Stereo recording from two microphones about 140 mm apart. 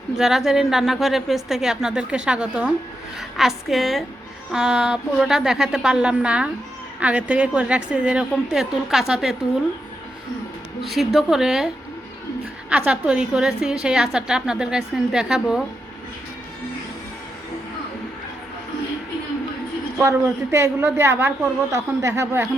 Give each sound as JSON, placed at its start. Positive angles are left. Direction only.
{"t": 0.1, "sound": "a woman's voice", "side_deg": -5}
{"t": 10.8, "sound": "a woman's voice", "side_deg": 0}
{"t": 12.7, "sound": "a woman's voice", "side_deg": -10}
{"t": 20.0, "sound": "a woman's voice", "side_deg": -20}